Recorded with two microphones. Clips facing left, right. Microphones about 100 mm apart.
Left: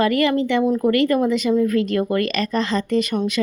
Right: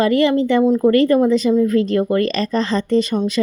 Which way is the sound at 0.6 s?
20° right (ahead or behind).